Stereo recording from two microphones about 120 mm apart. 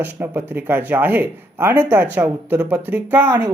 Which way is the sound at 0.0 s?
15° right (ahead or behind).